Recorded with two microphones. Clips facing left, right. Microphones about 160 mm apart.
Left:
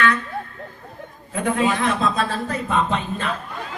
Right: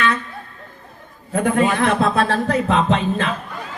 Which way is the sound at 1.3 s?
50° right (ahead or behind).